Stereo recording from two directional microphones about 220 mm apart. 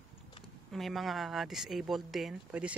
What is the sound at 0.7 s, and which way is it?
Speech, centre (ahead or behind).